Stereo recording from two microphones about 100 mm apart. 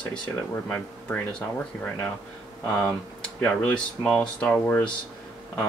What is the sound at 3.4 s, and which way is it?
Speech, 10° left (ahead or behind).